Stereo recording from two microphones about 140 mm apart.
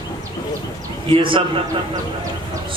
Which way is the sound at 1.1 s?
40° right (ahead or behind).